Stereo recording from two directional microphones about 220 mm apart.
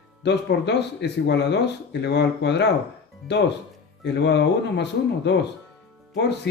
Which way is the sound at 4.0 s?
50° left (ahead or behind).